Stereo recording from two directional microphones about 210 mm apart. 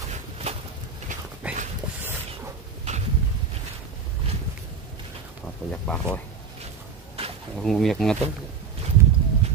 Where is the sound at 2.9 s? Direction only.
35° right (ahead or behind).